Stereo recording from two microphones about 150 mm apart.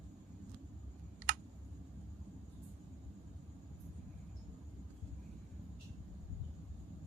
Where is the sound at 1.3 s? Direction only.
70° right (ahead or behind).